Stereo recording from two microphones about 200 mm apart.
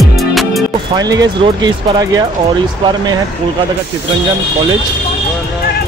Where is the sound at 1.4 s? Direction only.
20° right (ahead or behind).